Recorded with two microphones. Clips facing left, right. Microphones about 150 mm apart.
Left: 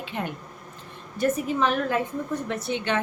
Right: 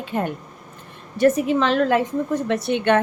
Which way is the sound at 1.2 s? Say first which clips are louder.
Right 6 dB; 80° right.